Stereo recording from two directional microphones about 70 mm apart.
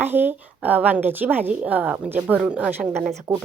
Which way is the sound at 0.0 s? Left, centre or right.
Right.